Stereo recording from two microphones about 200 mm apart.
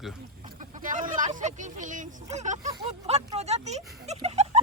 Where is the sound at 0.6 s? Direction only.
40° right (ahead or behind).